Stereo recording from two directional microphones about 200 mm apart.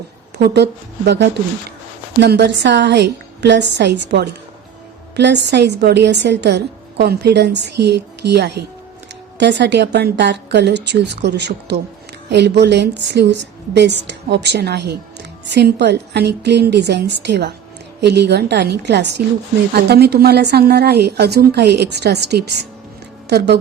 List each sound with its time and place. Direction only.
0.3 s a woman's voice: 55° right (ahead or behind)